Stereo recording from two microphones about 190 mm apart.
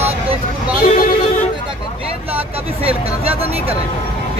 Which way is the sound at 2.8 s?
30° right (ahead or behind).